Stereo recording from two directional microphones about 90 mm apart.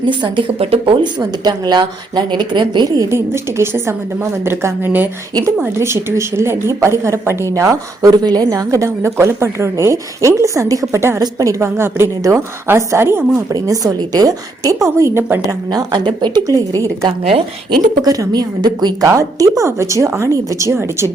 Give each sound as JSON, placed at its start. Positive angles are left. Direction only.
{"t": 0.0, "sound": "a woman's voice", "side_deg": -65}
{"t": 1.2, "sound": "a woman's voice", "side_deg": -50}
{"t": 3.1, "sound": "a woman's voice", "side_deg": -30}
{"t": 13.5, "sound": "speech", "side_deg": -45}
{"t": 15.7, "sound": "a woman's voice", "side_deg": -55}
{"t": 16.6, "sound": "speech", "side_deg": -40}
{"t": 17.1, "sound": "a woman's voice", "side_deg": -90}
{"t": 18.0, "sound": "a woman's voice", "side_deg": -45}
{"t": 19.0, "sound": "speech", "side_deg": -35}